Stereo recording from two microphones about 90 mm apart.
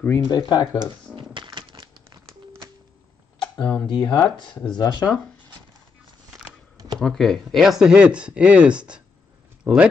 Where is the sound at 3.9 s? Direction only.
60° left (ahead or behind); by 5.2 s 45° left (ahead or behind).